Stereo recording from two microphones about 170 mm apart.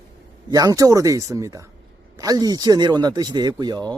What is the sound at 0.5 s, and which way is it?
Speech, 20° right (ahead or behind).